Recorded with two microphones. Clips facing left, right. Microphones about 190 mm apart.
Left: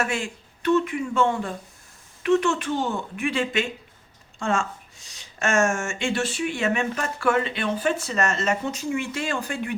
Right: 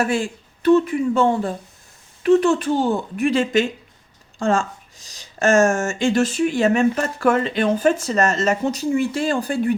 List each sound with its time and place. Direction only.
0.0 s speech: 35° right (ahead or behind)